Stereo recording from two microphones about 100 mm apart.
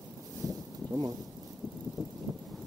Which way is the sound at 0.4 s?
40° right (ahead or behind).